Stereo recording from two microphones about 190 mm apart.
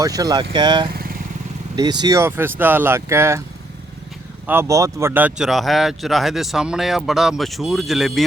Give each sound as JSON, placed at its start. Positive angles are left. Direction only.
{"t": 0.0, "sound": "speech", "side_deg": -20}
{"t": 0.9, "sound": "vehicle", "side_deg": -50}
{"t": 1.7, "sound": "speech", "side_deg": -20}
{"t": 4.4, "sound": "speech", "side_deg": -15}